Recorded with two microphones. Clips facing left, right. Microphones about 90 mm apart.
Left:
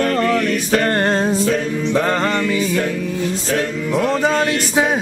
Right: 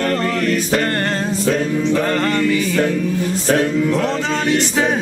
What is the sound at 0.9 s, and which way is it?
Music, 20° left (ahead or behind).